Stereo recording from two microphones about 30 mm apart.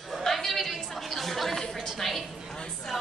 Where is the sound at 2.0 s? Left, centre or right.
Centre.